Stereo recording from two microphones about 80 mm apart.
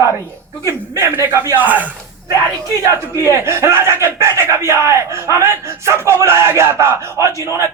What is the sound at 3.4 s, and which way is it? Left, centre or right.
Speech, right.